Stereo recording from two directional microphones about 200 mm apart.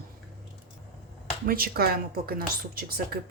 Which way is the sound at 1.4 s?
50° right (ahead or behind).